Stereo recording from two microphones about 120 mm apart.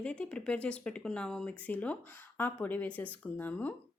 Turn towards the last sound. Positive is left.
turn(degrees=15)  # may be behind; listen again after turning